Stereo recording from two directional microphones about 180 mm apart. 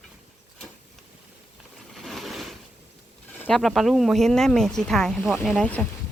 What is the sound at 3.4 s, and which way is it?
Speech, 5° left (ahead or behind).